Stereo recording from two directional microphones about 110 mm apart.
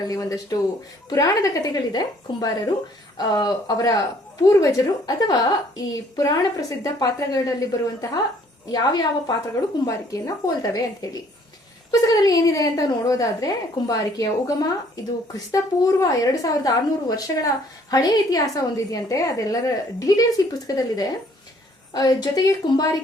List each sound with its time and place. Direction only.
0.1 s a woman's voice: 30° left (ahead or behind)
16.0 s a woman's voice: 35° left (ahead or behind)